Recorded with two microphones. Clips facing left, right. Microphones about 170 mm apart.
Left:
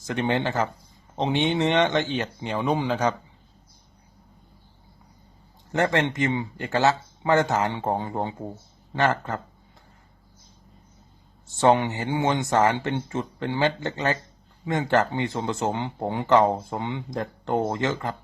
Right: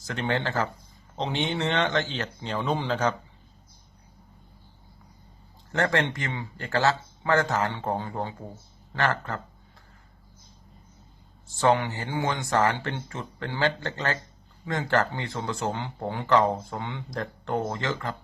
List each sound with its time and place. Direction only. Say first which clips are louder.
0.0 s speech: left 4 dB; 20° left (ahead or behind)
5.7 s speech: left 3 dB; 20° left (ahead or behind)
11.4 s speech: left 3 dB; 20° left (ahead or behind)